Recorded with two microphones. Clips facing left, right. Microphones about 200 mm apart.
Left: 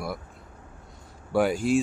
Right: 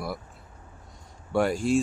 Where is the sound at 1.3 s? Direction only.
Centre (ahead or behind).